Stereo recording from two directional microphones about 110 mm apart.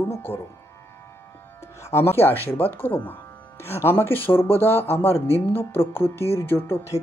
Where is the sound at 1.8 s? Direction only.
25° left (ahead or behind).